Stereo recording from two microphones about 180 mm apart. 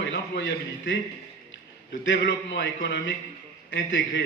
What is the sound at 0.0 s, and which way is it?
Speech, 85° left.